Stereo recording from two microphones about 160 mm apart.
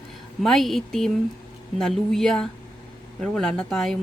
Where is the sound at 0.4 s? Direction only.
Centre (ahead or behind).